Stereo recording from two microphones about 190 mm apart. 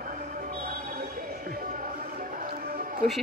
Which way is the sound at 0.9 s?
45° right (ahead or behind).